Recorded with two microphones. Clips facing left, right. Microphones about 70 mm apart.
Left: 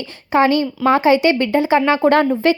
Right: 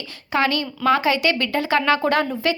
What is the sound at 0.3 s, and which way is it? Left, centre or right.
Speech, left.